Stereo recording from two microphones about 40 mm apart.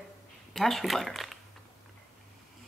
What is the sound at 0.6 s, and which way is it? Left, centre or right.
Speech, centre.